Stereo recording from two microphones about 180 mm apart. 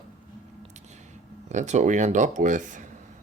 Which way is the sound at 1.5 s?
40° right (ahead or behind).